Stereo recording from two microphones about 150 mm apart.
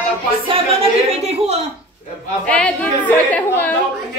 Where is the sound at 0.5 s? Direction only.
40° right (ahead or behind).